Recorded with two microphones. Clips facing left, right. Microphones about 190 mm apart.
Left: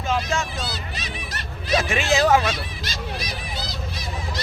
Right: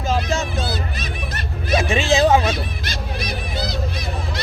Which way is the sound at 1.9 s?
30° right (ahead or behind).